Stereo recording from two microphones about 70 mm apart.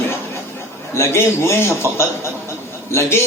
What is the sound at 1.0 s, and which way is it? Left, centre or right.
A man's voice, left.